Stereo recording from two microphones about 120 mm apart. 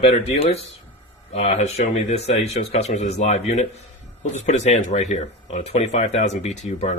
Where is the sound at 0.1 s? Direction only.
55° left (ahead or behind).